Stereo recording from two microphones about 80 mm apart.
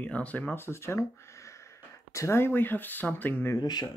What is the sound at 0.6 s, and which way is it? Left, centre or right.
Speech, left.